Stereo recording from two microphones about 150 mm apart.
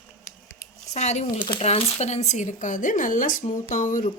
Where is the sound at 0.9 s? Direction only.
45° left (ahead or behind).